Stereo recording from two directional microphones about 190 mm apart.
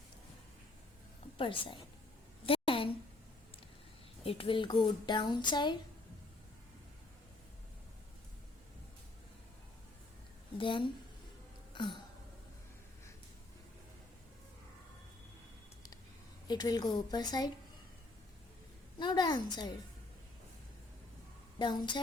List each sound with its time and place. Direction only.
1.4 s speech: 25° left (ahead or behind)
2.5 s a sound: 30° left (ahead or behind)
4.2 s speech: 30° left (ahead or behind)
10.6 s speech: 25° left (ahead or behind)
11.7 s a sound: 25° left (ahead or behind)
16.5 s speech: 20° left (ahead or behind)
18.9 s speech: 20° left (ahead or behind)
21.6 s speech: 25° left (ahead or behind)